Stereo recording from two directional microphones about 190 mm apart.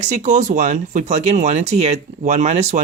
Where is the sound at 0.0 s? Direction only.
40° right (ahead or behind).